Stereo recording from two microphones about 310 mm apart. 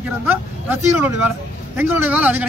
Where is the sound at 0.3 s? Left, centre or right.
Centre.